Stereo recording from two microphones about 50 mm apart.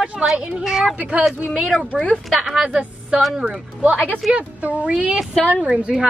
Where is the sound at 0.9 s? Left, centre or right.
Right.